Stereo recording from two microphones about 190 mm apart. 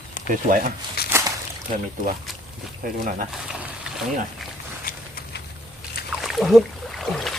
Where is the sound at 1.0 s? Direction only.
55° left (ahead or behind).